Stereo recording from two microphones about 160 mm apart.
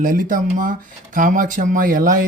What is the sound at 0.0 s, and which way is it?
Speech, 55° right (ahead or behind).